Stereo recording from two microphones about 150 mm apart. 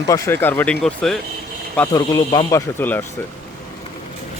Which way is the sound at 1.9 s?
25° left (ahead or behind).